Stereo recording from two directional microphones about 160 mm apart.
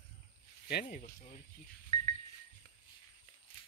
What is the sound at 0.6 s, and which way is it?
Speech, 80° left.